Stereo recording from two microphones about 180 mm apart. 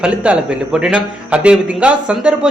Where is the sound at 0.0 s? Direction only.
5° right (ahead or behind).